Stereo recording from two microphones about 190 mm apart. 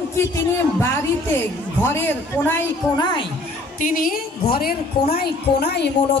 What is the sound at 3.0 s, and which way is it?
Speech, 25° left (ahead or behind).